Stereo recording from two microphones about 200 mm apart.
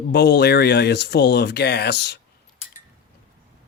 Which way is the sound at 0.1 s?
55° left (ahead or behind).